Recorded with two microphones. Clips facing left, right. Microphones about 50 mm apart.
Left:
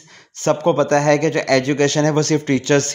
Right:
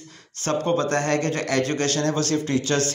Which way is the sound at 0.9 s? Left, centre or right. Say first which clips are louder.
Left 8 dB; left.